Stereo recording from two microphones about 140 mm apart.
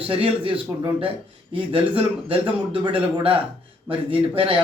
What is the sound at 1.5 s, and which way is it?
Speech, 40° right (ahead or behind).